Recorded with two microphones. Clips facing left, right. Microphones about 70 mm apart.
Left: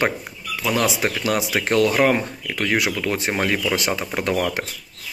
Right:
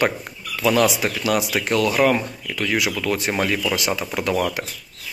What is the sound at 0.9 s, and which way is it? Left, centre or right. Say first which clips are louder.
Speech: even; left.